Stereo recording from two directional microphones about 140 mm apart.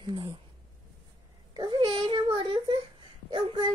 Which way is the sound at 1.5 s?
30° right (ahead or behind).